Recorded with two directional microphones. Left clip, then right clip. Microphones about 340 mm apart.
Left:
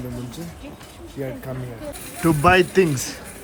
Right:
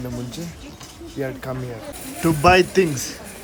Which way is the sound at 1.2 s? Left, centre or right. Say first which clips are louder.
Right 3 dB; centre.